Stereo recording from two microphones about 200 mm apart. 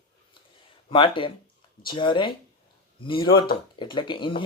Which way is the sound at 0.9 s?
25° left (ahead or behind).